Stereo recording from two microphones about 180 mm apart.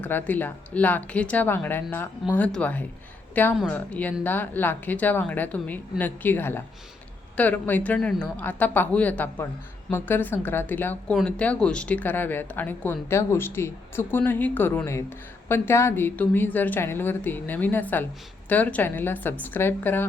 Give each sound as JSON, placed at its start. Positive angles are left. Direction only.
{"t": 0.0, "sound": "speech", "side_deg": 10}